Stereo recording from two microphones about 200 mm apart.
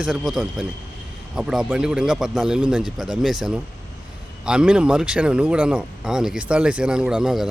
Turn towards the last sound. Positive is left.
turn(degrees=0)  # may be behind; listen again after turning